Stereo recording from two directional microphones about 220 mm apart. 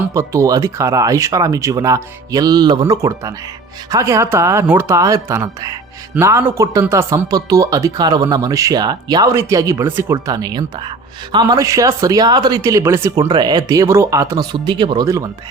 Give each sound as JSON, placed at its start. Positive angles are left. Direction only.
{"t": 0.0, "sound": "speech", "side_deg": -15}